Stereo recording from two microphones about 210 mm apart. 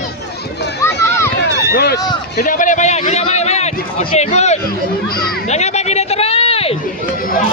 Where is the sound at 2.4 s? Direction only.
40° left (ahead or behind).